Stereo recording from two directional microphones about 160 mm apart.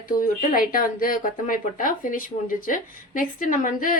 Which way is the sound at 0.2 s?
60° left (ahead or behind).